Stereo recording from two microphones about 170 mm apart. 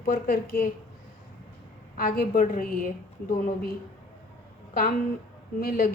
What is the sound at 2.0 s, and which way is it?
Speech, 55° left (ahead or behind).